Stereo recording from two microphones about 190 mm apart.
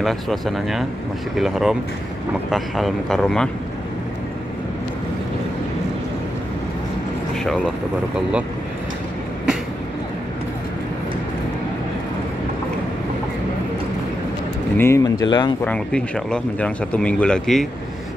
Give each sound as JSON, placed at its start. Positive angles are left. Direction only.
{"t": 0.0, "sound": "speech", "side_deg": 0}
{"t": 7.4, "sound": "speech", "side_deg": 0}
{"t": 14.8, "sound": "speech", "side_deg": 15}
{"t": 15.6, "sound": "speech", "side_deg": 5}